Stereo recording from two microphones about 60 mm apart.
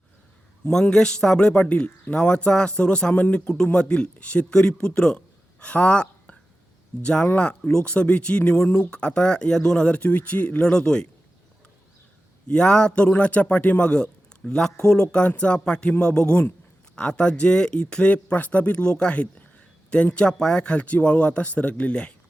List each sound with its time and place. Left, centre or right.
0.7 s speech: centre
10.0 s speech: left; by 11.1 s centre
12.5 s speech: centre